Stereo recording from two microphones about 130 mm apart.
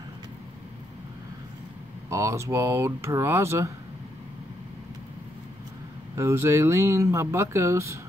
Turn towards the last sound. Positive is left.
turn(degrees=-20)  # may be behind; listen again after turning